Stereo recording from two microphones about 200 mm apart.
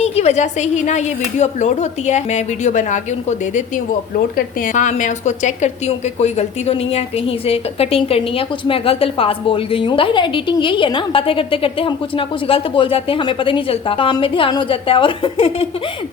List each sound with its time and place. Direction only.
0.0 s a woman's voice: 35° left (ahead or behind)